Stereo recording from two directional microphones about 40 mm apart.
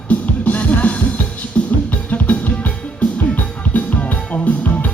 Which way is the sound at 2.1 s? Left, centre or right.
Left.